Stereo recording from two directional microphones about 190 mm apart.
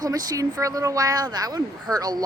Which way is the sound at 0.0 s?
20° right (ahead or behind).